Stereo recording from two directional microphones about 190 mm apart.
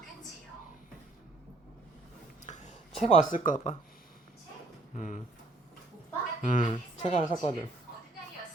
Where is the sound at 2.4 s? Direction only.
40° left (ahead or behind).